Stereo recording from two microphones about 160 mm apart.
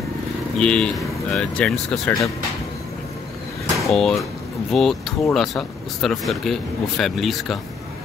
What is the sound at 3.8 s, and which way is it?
Speech, 5° left (ahead or behind).